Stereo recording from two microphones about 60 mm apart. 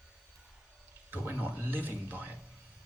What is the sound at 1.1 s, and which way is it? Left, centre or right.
A man's voice, right.